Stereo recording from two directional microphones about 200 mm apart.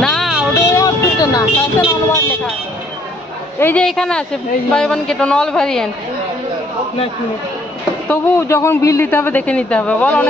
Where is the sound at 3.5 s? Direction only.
10° left (ahead or behind).